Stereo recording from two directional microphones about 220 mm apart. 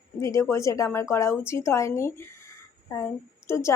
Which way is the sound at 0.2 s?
15° left (ahead or behind).